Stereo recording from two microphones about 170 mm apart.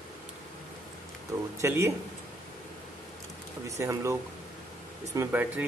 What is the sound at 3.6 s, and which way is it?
Speech, 20° right (ahead or behind).